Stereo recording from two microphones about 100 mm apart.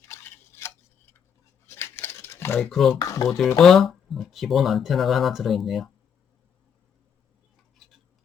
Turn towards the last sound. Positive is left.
turn(degrees=0)  # may be behind; listen again after turning